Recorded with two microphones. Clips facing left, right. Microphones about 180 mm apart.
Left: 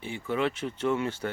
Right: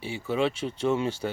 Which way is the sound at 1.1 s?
10° right (ahead or behind).